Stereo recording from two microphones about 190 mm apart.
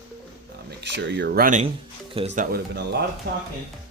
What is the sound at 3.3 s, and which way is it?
Speech, 55° right (ahead or behind).